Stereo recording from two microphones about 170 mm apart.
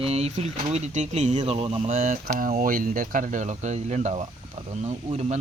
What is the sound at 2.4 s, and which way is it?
Speech, 55° right (ahead or behind).